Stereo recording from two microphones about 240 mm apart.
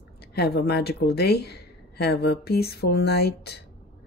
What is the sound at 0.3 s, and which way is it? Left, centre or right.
Speech, left.